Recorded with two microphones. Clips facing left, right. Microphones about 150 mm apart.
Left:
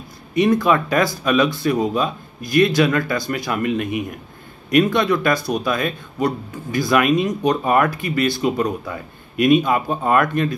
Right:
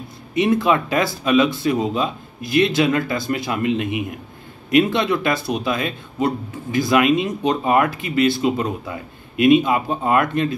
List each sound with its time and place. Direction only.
0.3 s speech: 20° right (ahead or behind)